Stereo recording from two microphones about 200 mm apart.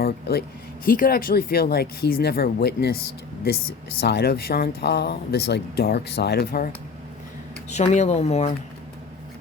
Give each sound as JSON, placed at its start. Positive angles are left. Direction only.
{"t": 0.0, "sound": "speech", "side_deg": 50}
{"t": 4.0, "sound": "speech", "side_deg": 55}
{"t": 7.7, "sound": "speech", "side_deg": 35}